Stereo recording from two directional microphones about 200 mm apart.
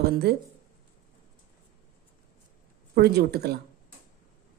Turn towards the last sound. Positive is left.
turn(degrees=-50)  # may be behind; listen again after turning